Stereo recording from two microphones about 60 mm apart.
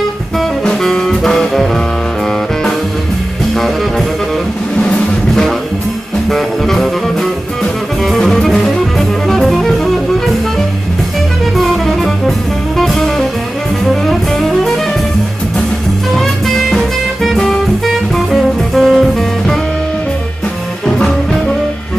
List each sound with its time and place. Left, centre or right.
0.4 s music: centre
6.3 s music: centre
11.5 s music: centre
16.2 s music: centre
20.8 s music: centre